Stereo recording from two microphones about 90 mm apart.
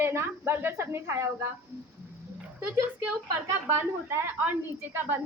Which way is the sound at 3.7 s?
25° right (ahead or behind).